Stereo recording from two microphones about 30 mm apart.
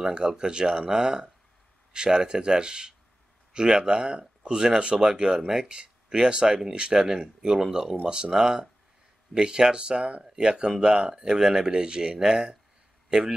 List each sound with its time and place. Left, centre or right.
0.1 s speech: right
8.3 s speech: centre